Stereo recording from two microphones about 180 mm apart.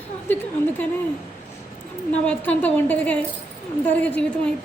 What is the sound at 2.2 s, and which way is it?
A woman's voice, 10° left (ahead or behind).